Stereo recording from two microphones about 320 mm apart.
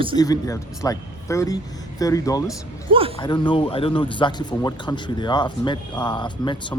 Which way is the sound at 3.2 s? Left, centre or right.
Centre.